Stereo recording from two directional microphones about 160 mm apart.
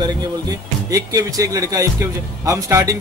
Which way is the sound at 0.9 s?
20° right (ahead or behind).